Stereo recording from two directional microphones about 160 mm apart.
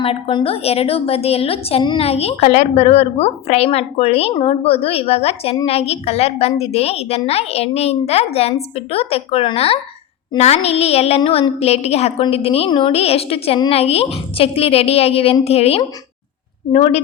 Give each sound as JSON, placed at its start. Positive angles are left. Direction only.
{"t": 0.0, "sound": "a woman's voice", "side_deg": 35}